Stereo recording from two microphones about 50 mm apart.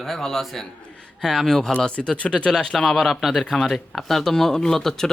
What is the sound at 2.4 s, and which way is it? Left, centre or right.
Speech, centre.